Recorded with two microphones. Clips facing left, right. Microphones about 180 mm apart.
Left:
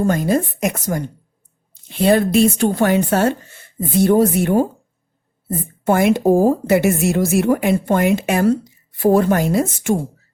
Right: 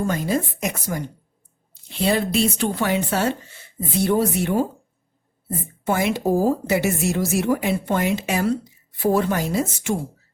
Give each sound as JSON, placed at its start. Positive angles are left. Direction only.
{"t": 0.1, "sound": "a woman's voice", "side_deg": 50}